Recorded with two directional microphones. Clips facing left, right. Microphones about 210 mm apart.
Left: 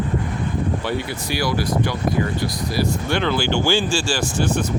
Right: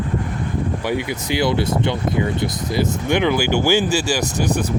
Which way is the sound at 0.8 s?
15° right (ahead or behind).